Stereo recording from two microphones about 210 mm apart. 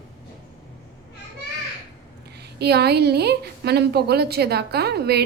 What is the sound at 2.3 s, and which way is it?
A woman's voice, 50° right (ahead or behind).